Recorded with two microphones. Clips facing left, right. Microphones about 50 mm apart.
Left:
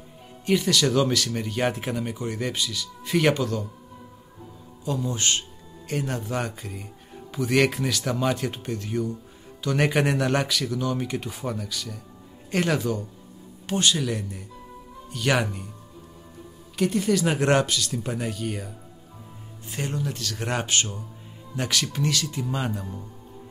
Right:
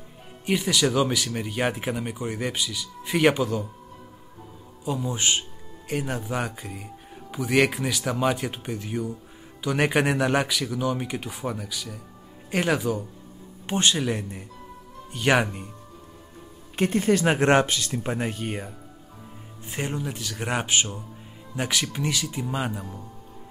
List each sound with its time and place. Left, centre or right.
0.5 s speech: centre
4.8 s speech: centre
13.7 s speech: right
16.7 s speech: right
19.7 s speech: centre